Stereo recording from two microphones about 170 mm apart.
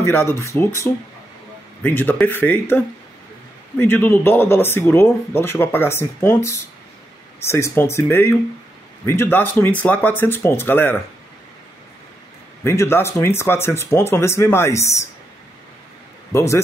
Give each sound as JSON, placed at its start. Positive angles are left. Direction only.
{"t": 0.0, "sound": "speech", "side_deg": 15}
{"t": 1.8, "sound": "speech", "side_deg": 10}
{"t": 12.6, "sound": "speech", "side_deg": 15}
{"t": 16.3, "sound": "a man's voice", "side_deg": 15}